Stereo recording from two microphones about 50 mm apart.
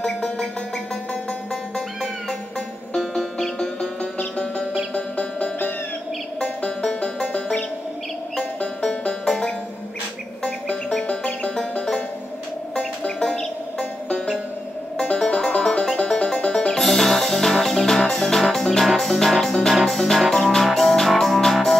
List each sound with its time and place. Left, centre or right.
0.0 s music: centre
3.3 s music: centre
4.9 s music: left
15.0 s music: centre